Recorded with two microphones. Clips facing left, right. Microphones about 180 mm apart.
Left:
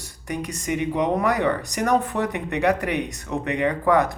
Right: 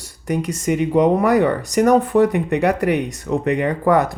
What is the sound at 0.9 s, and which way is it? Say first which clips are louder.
Speech: right 8 dB; 35° right (ahead or behind).